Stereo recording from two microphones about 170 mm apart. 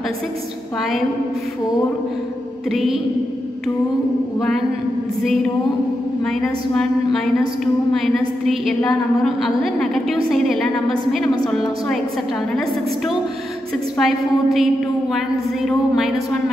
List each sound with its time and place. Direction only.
2.7 s a woman's voice: centre (ahead or behind)
6.2 s a woman's voice: 5° left (ahead or behind)
13.9 s a woman's voice: centre (ahead or behind)